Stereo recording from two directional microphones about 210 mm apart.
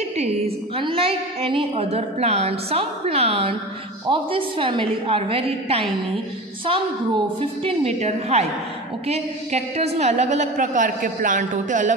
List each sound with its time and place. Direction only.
0.7 s a woman's voice: 25° right (ahead or behind)
7.6 s a woman's voice: 30° right (ahead or behind)